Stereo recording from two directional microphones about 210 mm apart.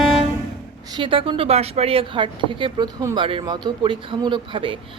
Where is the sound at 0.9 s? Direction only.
20° right (ahead or behind).